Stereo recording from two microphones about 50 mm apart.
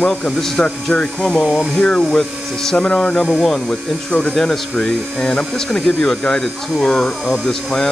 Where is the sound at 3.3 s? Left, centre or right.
Centre.